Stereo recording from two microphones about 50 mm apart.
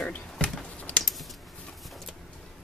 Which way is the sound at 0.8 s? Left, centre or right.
Left.